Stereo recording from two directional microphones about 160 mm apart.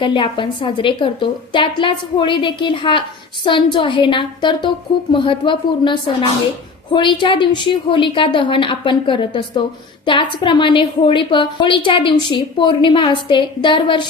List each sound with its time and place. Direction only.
0.0 s a woman's voice: 30° left (ahead or behind)